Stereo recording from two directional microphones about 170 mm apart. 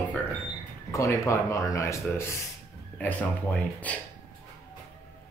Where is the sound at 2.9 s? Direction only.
10° left (ahead or behind).